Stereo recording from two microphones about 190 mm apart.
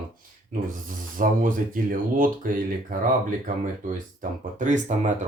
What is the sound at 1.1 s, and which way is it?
Speech, 45° right (ahead or behind).